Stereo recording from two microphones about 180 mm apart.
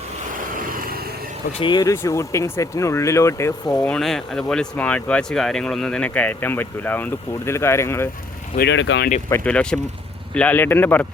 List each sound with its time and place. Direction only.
0.3 s vehicle: 50° right (ahead or behind)
1.5 s speech: 25° left (ahead or behind)
3.8 s speech: 5° left (ahead or behind)
8.5 s speech: 80° left
9.3 s speech: 5° left (ahead or behind)